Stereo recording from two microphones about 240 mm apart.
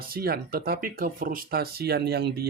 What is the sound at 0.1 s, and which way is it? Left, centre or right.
Speech, right.